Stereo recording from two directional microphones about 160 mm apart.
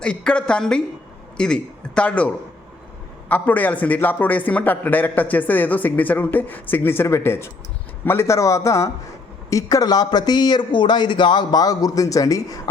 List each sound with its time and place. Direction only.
0.0 s a woman's voice: 5° left (ahead or behind); by 12.5 s 20° left (ahead or behind)